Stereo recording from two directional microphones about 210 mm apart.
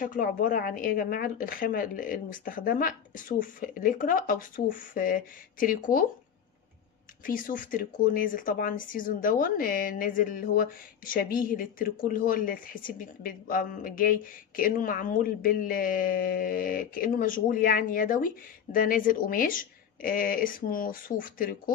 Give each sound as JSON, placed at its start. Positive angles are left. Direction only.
{"t": 0.0, "sound": "speech", "side_deg": 40}
{"t": 7.2, "sound": "speech", "side_deg": 40}